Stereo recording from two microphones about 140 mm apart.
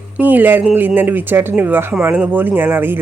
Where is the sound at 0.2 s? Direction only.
10° right (ahead or behind).